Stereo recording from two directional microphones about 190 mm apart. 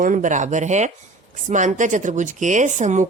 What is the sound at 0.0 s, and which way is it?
Speech, 45° right (ahead or behind).